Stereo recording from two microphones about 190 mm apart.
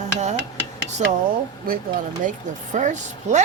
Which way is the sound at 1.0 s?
35° right (ahead or behind).